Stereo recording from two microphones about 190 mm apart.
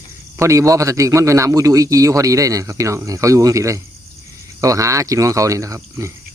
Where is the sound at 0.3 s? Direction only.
15° right (ahead or behind).